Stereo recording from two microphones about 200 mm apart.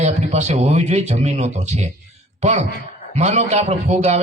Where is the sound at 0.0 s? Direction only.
35° right (ahead or behind).